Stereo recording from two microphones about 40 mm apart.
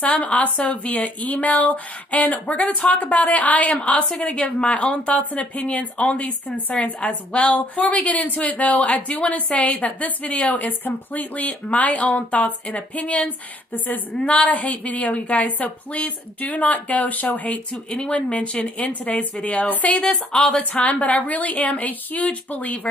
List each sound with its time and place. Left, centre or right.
0.0 s speech: left
18.1 s speech: left
20.0 s speech: centre; by 22.8 s left